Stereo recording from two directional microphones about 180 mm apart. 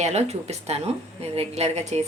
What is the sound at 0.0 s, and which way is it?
A woman's voice, 40° right (ahead or behind).